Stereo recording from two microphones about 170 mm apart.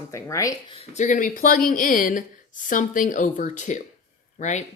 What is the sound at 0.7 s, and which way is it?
A woman's voice, 40° left (ahead or behind).